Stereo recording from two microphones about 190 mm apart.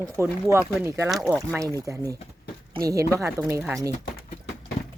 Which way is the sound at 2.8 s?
15° right (ahead or behind).